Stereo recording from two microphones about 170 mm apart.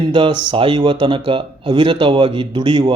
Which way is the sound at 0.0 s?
30° right (ahead or behind).